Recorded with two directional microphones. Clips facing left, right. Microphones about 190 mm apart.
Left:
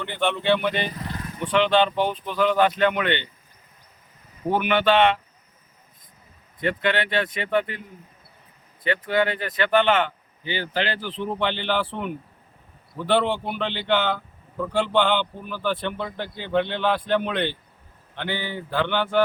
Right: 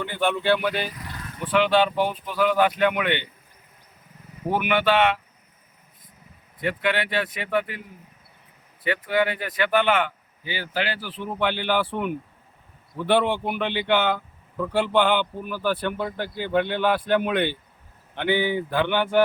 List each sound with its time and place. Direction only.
0.0 s speech: 5° right (ahead or behind)
0.9 s vehicle: 30° left (ahead or behind)
1.4 s speech: 5° right (ahead or behind)
4.4 s speech: 10° right (ahead or behind)
6.6 s speech: 10° right (ahead or behind)
8.8 s speech: 10° right (ahead or behind)